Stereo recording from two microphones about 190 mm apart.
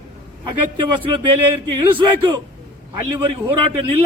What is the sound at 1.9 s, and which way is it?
Speech, 25° right (ahead or behind).